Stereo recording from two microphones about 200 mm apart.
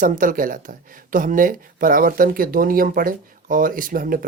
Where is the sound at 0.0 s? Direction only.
40° right (ahead or behind).